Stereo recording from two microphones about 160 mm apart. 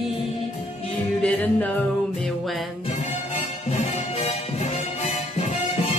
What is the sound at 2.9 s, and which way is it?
Music, 45° left (ahead or behind).